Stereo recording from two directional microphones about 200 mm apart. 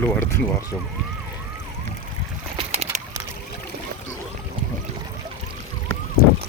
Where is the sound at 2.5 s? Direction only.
35° right (ahead or behind).